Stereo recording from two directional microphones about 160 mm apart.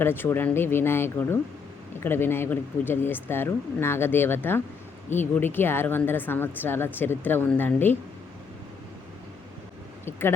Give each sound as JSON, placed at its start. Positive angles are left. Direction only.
{"t": 0.0, "sound": "speech", "side_deg": 15}
{"t": 10.1, "sound": "speech", "side_deg": 15}